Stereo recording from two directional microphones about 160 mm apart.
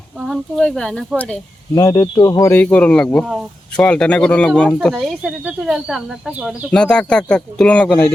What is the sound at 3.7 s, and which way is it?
Speech, 5° left (ahead or behind).